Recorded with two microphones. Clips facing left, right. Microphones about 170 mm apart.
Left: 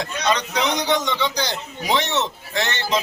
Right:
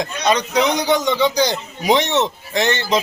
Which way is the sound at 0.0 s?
15° right (ahead or behind).